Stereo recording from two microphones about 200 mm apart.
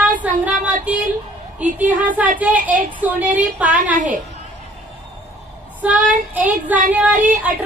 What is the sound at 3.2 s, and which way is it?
A woman's voice, 40° right (ahead or behind).